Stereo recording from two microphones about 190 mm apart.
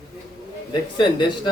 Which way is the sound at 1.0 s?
25° left (ahead or behind).